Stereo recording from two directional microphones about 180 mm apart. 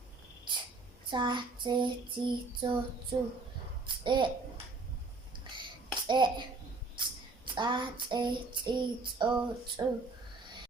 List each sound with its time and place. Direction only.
1.1 s child singing: 25° right (ahead or behind)
4.0 s a child's voice: 25° right (ahead or behind)
5.5 s a sound: 25° right (ahead or behind)
6.9 s female singing: 25° right (ahead or behind)
9.8 s child singing: 20° right (ahead or behind)